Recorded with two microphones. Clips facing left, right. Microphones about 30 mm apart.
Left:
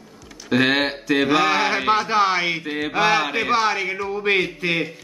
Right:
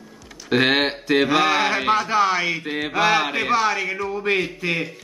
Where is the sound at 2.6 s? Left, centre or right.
Centre.